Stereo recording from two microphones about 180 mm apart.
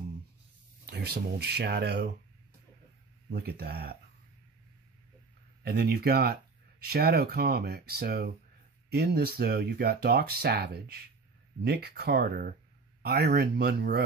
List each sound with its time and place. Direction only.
0.8 s speech: 65° right (ahead or behind)
3.3 s speech: 65° right (ahead or behind)
5.6 s speech: 60° right (ahead or behind)